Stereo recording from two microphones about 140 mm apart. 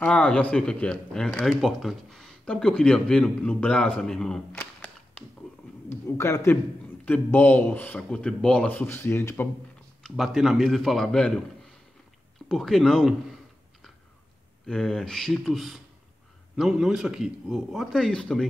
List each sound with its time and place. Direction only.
0.0 s speech: 5° left (ahead or behind)
5.9 s a man's voice: 20° left (ahead or behind)
10.0 s speech: centre (ahead or behind)
12.4 s speech: centre (ahead or behind)
14.7 s speech: 5° left (ahead or behind)